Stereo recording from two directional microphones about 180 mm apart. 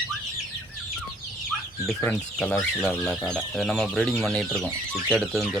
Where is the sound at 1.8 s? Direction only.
5° left (ahead or behind).